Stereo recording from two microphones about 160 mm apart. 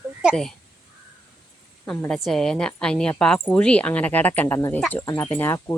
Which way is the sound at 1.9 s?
5° left (ahead or behind).